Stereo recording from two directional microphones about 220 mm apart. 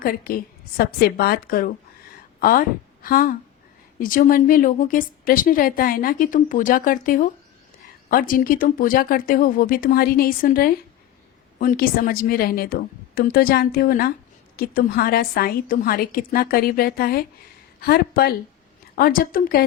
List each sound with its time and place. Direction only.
0.0 s a woman's voice: 40° left (ahead or behind)